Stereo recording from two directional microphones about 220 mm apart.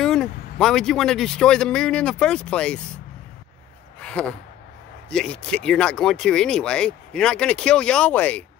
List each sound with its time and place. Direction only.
0.0 s speech: 5° left (ahead or behind)
4.0 s speech: 5° left (ahead or behind)